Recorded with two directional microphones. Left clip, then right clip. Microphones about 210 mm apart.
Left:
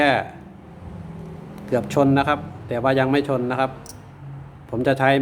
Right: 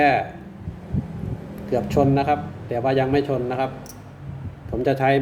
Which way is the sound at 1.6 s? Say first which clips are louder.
Left 1 dB; 35° left (ahead or behind).